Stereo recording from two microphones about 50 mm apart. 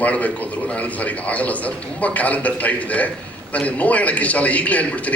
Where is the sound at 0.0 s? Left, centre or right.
Left.